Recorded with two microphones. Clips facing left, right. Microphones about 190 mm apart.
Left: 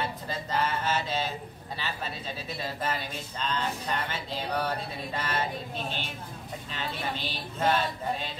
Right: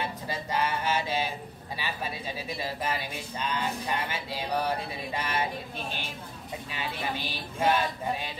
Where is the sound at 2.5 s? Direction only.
10° right (ahead or behind).